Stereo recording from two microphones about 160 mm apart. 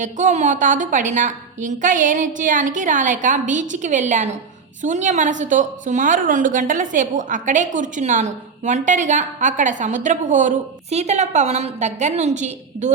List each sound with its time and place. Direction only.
0.0 s a woman's voice: 50° right (ahead or behind)